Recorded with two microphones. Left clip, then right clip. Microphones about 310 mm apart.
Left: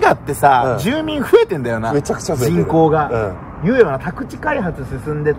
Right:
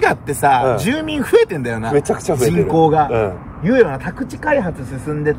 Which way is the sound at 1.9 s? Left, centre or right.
Right.